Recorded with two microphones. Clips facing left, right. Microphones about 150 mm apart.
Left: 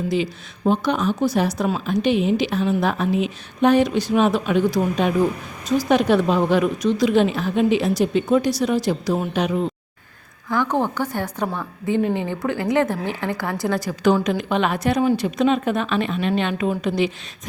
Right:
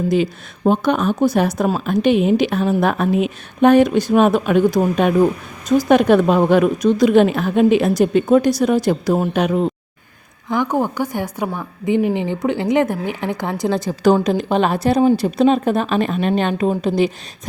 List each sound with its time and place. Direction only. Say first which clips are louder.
0.1 s speech: right 5 dB; 50° right (ahead or behind)
10.5 s a woman's voice: right 2 dB; 15° right (ahead or behind)
14.0 s a woman's voice: right 4 dB; 35° right (ahead or behind)